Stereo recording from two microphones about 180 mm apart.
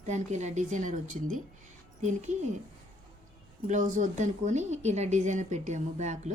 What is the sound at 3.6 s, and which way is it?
A woman's voice, 45° right (ahead or behind).